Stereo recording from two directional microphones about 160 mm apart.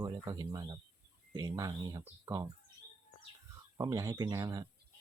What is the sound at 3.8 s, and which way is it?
Speech, 20° right (ahead or behind).